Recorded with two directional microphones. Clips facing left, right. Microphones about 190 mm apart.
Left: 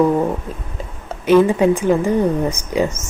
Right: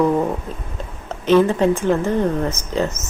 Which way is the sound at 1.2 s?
10° left (ahead or behind).